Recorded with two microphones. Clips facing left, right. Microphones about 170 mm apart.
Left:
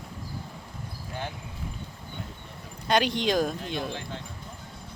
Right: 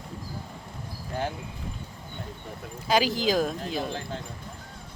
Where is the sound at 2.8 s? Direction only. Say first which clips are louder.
Right 1 dB; 5° right (ahead or behind).